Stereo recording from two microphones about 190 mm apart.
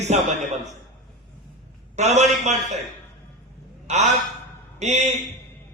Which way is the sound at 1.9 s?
35° right (ahead or behind).